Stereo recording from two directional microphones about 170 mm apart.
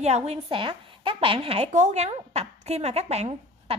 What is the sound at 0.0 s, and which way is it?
A woman's voice, 40° right (ahead or behind).